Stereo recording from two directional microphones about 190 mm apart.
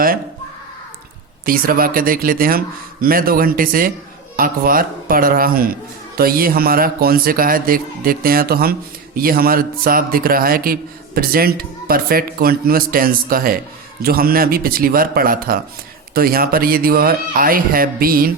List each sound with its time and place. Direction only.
1.5 s a man's voice: 50° right (ahead or behind)